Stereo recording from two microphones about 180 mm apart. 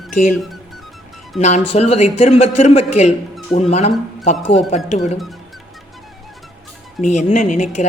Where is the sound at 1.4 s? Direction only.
40° left (ahead or behind).